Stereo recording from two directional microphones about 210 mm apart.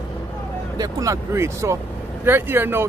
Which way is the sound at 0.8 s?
15° right (ahead or behind).